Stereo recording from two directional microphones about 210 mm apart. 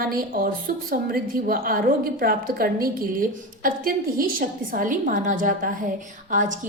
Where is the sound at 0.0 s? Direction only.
45° right (ahead or behind).